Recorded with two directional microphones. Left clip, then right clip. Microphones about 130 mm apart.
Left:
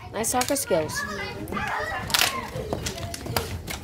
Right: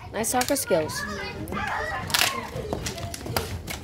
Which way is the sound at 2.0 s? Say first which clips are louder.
Left 1 dB; 5° right (ahead or behind).